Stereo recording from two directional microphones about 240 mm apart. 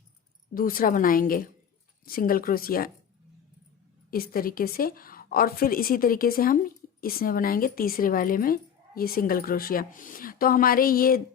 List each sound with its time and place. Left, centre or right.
0.5 s a woman's voice: left
4.1 s a woman's voice: left